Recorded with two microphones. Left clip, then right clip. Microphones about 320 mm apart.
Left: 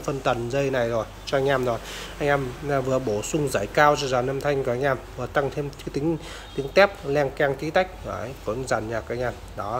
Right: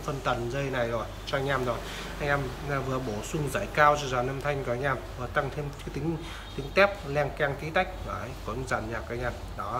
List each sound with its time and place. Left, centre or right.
0.0 s speech: left